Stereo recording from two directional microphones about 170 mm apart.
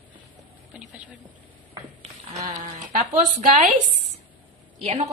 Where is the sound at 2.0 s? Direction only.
40° right (ahead or behind).